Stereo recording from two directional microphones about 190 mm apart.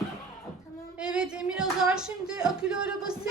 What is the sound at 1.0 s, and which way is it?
Speech, 5° right (ahead or behind).